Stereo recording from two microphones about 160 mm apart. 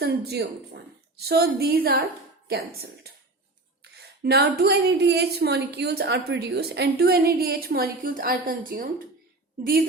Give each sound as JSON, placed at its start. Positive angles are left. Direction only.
{"t": 0.0, "sound": "a woman's voice", "side_deg": -90}
{"t": 1.2, "sound": "a woman's voice", "side_deg": -80}